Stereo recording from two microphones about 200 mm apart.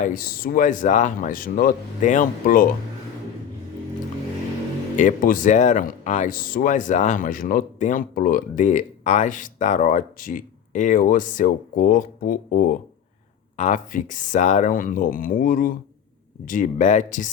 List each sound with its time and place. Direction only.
0.0 s speech: 45° left (ahead or behind)
4.9 s speech: 40° left (ahead or behind)